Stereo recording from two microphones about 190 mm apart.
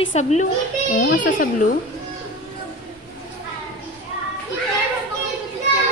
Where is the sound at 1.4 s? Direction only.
45° left (ahead or behind).